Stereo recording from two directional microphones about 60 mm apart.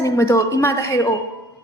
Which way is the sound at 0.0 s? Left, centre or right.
Left.